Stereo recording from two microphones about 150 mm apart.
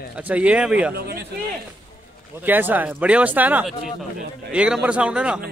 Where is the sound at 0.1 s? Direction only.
10° right (ahead or behind).